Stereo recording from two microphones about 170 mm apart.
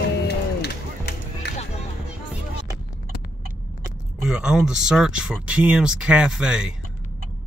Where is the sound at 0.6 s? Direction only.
75° left (ahead or behind).